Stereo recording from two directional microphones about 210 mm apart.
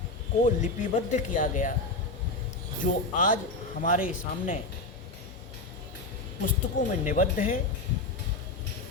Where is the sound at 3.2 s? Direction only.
40° left (ahead or behind).